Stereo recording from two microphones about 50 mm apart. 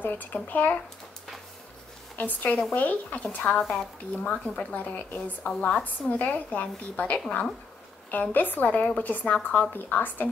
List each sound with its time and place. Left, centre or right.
0.0 s a woman's voice: left
2.1 s a woman's voice: left
3.4 s a woman's voice: centre
4.2 s a woman's voice: left
9.7 s a woman's voice: left